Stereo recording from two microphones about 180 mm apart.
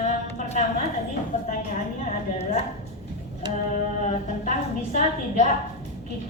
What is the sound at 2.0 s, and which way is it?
Speech, 40° left (ahead or behind).